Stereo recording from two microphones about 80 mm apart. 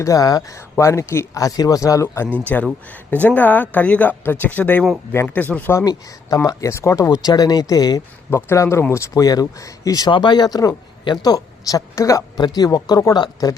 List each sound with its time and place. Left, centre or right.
0.0 s speech: left
0.5 s a man's voice: left
1.4 s speech: left
2.5 s speech: left
5.8 s speech: left
8.3 s a man's voice: left
10.1 s speech: left
12.5 s speech: left
13.1 s speech: left